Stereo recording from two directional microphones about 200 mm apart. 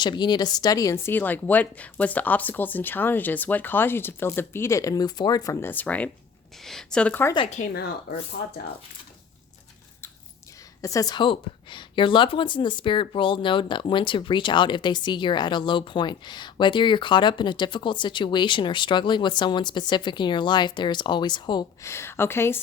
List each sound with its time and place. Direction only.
0.0 s speech: 20° left (ahead or behind)
7.3 s a woman's voice: 30° left (ahead or behind)
7.6 s speech: 50° left (ahead or behind)
10.8 s a woman's voice: 15° left (ahead or behind)